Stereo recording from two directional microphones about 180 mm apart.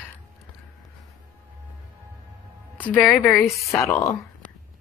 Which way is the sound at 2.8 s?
10° left (ahead or behind).